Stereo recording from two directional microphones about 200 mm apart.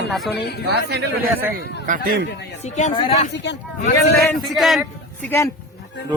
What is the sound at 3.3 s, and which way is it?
Speech, 60° left (ahead or behind).